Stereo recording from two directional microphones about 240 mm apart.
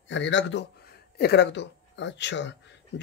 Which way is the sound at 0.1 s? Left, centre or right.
Left.